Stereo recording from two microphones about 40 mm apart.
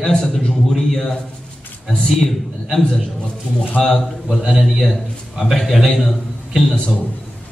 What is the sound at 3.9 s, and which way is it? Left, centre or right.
Speech, centre.